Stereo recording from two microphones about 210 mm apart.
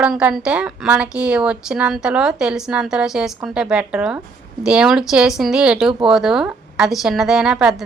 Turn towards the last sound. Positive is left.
turn(degrees=0)  # may be behind; listen again after turning